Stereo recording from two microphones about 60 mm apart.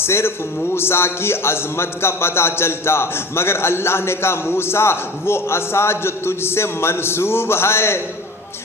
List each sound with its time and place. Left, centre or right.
0.0 s a man's voice: left